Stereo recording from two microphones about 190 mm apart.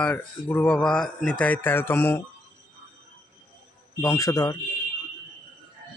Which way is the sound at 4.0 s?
15° left (ahead or behind).